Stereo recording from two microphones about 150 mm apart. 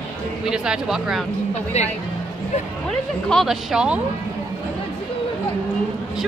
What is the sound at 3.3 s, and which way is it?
Speech, centre (ahead or behind).